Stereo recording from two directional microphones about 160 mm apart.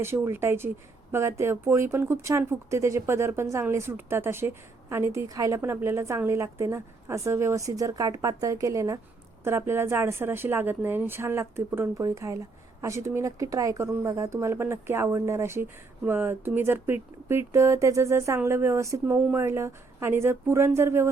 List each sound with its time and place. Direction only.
0.0 s speech: 15° right (ahead or behind)